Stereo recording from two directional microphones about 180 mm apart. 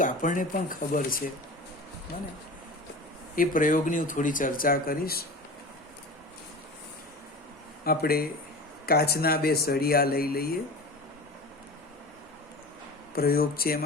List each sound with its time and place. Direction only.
0.0 s speech: 45° left (ahead or behind)
3.3 s speech: 50° left (ahead or behind)
7.9 s speech: 55° left (ahead or behind)
13.1 s speech: 55° left (ahead or behind)